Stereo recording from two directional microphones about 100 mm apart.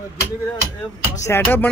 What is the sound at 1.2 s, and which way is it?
Speech, 25° left (ahead or behind).